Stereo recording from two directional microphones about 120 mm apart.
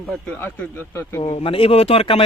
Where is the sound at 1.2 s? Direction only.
50° left (ahead or behind).